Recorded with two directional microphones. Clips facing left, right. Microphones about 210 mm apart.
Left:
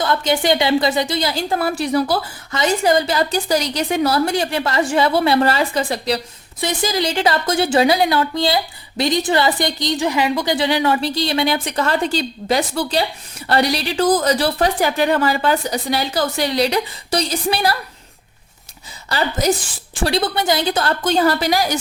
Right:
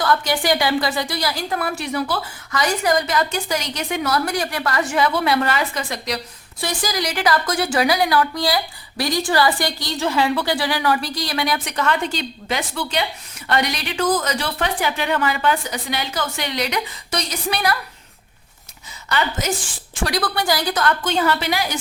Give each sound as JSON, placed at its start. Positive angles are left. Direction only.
{"t": 0.0, "sound": "a woman's voice", "side_deg": 25}
{"t": 2.5, "sound": "a woman's voice", "side_deg": 25}
{"t": 19.0, "sound": "a woman's voice", "side_deg": 30}